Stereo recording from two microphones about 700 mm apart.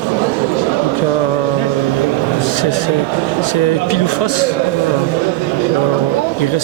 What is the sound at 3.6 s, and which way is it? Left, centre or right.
Speech, left.